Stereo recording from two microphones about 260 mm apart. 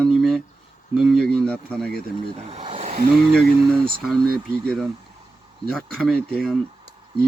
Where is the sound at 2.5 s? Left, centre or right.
Right.